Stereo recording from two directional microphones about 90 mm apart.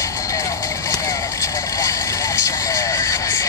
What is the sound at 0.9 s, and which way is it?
Vehicle, 40° left (ahead or behind).